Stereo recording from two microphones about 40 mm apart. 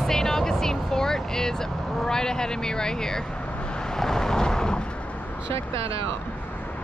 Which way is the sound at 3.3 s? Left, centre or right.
Left.